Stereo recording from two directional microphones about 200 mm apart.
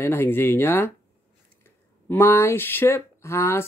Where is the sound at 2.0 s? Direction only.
10° left (ahead or behind).